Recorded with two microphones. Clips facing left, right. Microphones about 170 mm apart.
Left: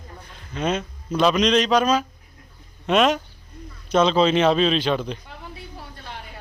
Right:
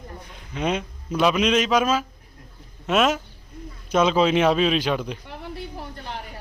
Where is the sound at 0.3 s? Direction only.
15° right (ahead or behind).